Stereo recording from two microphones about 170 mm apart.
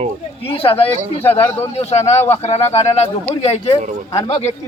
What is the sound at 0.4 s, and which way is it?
Speech, 35° left (ahead or behind).